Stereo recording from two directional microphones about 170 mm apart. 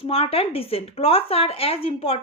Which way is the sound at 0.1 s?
35° left (ahead or behind).